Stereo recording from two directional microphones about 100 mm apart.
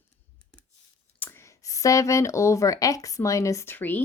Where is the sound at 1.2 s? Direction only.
25° left (ahead or behind).